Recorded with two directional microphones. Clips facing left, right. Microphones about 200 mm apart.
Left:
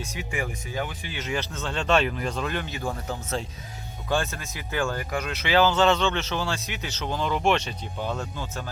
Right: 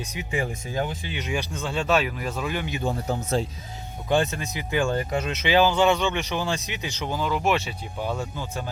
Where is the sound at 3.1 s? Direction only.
35° right (ahead or behind).